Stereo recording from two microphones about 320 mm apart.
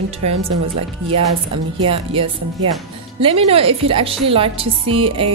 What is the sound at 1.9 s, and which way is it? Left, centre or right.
A woman's voice, centre.